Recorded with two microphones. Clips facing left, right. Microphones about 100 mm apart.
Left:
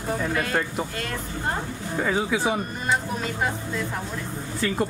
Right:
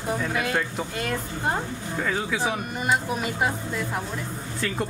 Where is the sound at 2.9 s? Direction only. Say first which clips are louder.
Right 1 dB; 10° right (ahead or behind).